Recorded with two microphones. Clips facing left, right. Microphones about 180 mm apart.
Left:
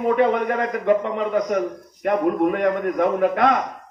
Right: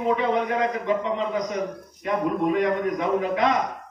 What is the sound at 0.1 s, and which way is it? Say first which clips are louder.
A man's voice: left 4 dB; 55° left (ahead or behind).